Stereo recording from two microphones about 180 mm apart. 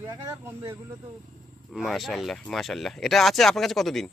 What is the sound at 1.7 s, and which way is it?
Speech, centre (ahead or behind).